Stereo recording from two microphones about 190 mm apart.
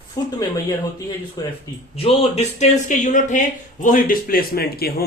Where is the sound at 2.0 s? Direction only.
30° left (ahead or behind).